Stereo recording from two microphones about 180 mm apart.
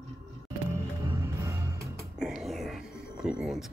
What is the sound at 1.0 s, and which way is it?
Music, 20° right (ahead or behind).